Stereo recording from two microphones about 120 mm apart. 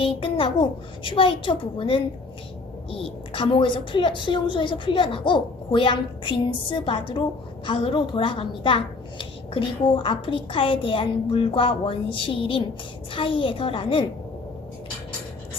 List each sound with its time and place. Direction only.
0.0 s a woman's voice: 50° left (ahead or behind)